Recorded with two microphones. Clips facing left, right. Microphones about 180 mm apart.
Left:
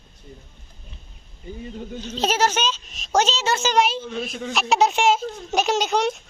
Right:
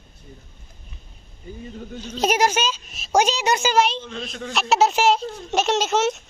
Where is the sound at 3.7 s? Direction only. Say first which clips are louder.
Even; centre (ahead or behind).